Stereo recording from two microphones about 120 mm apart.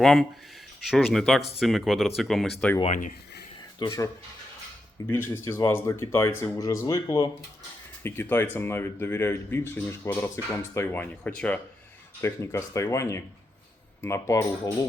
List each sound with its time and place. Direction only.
0.0 s speech: 5° left (ahead or behind)
2.8 s speech: 90° left
3.8 s speech: 25° left (ahead or behind); by 11.6 s 10° left (ahead or behind)
12.2 s speech: 25° left (ahead or behind)